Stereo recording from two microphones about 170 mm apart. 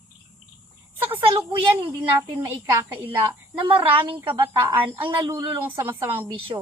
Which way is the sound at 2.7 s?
15° right (ahead or behind).